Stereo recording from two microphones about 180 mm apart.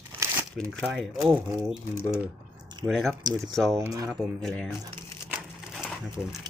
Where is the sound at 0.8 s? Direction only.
Centre (ahead or behind).